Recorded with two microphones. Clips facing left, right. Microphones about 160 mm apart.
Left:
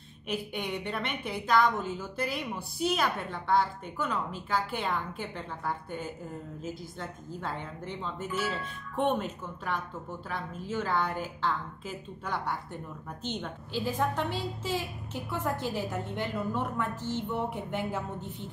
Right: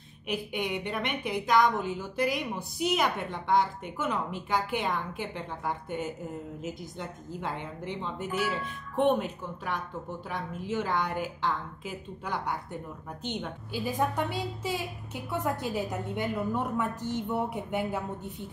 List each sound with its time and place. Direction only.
0.3 s a woman's voice: 15° right (ahead or behind)